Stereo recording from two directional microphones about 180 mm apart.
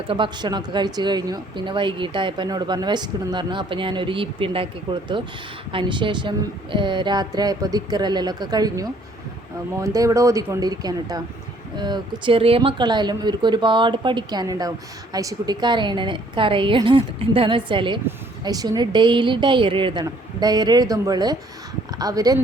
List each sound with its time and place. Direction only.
0.1 s speech: 25° right (ahead or behind)